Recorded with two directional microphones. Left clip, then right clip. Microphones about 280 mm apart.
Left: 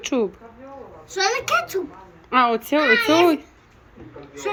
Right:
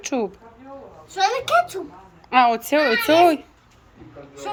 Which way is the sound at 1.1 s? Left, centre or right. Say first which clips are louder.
Right 1 dB; right.